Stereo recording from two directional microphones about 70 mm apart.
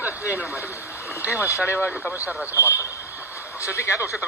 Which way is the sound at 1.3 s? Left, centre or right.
Left.